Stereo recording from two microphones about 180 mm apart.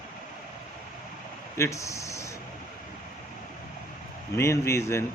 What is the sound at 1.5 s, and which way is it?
Speech, 15° left (ahead or behind).